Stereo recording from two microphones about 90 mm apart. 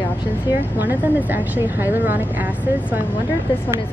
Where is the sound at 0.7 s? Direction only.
20° right (ahead or behind).